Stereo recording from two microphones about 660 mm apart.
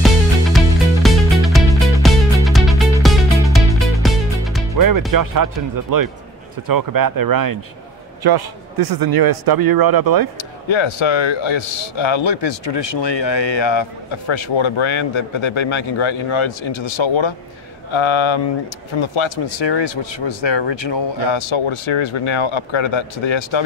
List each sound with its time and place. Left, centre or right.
1.0 s music: centre
4.7 s speech: right
10.7 s speech: left